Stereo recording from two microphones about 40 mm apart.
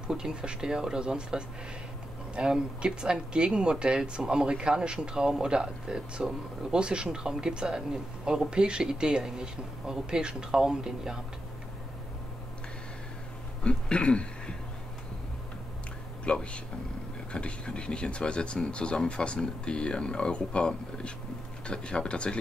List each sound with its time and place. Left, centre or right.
0.1 s speech: right
13.7 s throat clearing: left
16.3 s speech: left